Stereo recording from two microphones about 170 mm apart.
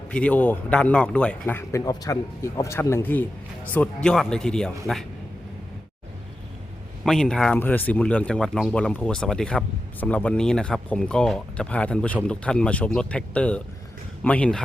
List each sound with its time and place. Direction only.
0.1 s speech: 5° left (ahead or behind)
7.0 s speech: centre (ahead or behind)